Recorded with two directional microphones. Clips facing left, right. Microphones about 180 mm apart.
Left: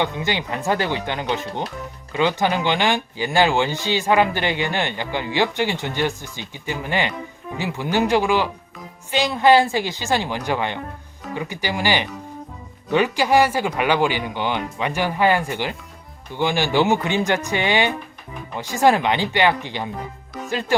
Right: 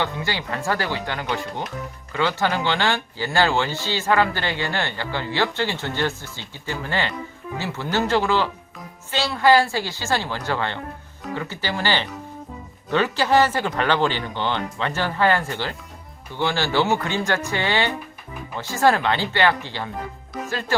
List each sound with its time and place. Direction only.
0.0 s speech: 20° left (ahead or behind)